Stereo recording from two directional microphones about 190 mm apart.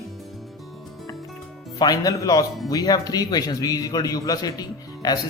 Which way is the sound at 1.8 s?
20° left (ahead or behind).